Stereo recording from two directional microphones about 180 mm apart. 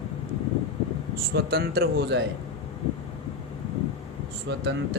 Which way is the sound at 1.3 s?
60° right (ahead or behind).